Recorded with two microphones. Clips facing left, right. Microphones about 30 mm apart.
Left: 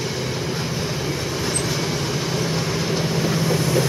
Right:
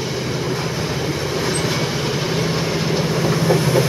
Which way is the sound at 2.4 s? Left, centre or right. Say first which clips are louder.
Right 3 dB; centre.